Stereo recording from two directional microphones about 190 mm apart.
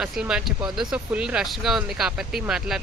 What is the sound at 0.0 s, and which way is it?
Speech, 5° right (ahead or behind).